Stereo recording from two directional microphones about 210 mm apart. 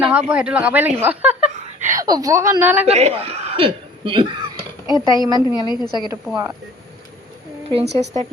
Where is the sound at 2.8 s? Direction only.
30° right (ahead or behind).